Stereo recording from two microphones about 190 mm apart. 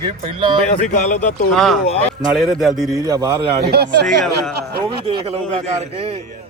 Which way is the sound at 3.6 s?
60° right (ahead or behind).